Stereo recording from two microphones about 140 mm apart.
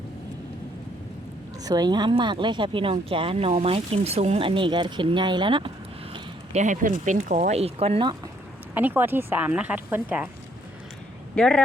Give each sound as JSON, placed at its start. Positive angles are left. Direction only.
{"t": 1.6, "sound": "speech", "side_deg": -30}
{"t": 6.5, "sound": "speech", "side_deg": -60}
{"t": 8.7, "sound": "speech", "side_deg": -10}
{"t": 11.3, "sound": "speech", "side_deg": 5}